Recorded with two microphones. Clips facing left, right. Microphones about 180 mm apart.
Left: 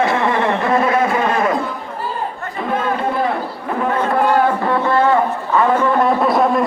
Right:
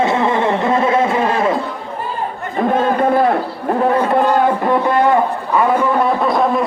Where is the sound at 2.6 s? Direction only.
45° right (ahead or behind).